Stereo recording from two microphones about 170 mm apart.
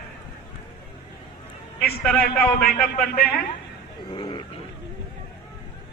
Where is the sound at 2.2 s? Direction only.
65° left (ahead or behind).